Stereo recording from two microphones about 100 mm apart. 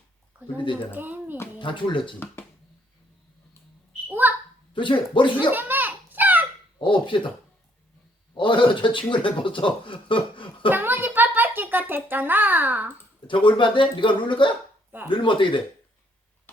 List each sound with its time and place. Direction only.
0.9 s speech: 20° right (ahead or behind)
1.5 s speech: 55° left (ahead or behind)
2.1 s speech: 20° left (ahead or behind)
4.1 s a sound: 20° right (ahead or behind)
4.7 s speech: 55° left (ahead or behind)
5.5 s a sound: 20° right (ahead or behind)
6.7 s speech: 55° left (ahead or behind)
8.4 s speech: 55° left (ahead or behind)
10.7 s a child's voice: 20° right (ahead or behind)
13.2 s speech: 55° left (ahead or behind)